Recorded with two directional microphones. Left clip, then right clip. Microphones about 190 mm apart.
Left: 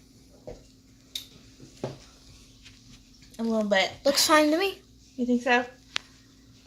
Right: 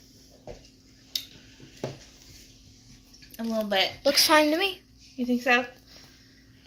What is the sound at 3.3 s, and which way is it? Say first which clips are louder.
Speech: left 2 dB; 45° left (ahead or behind).